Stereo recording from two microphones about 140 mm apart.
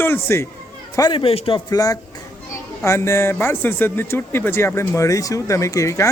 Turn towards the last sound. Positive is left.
turn(degrees=20)  # may be behind; listen again after turning